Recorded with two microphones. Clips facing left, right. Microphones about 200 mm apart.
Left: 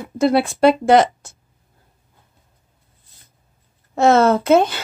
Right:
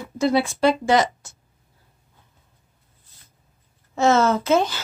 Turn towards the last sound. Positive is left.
turn(degrees=55)  # may be behind; listen again after turning